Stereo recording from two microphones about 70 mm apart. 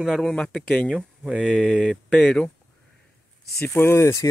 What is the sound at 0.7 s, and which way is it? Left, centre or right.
Speech, centre.